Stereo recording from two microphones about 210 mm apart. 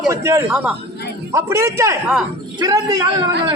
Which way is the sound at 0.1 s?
15° right (ahead or behind).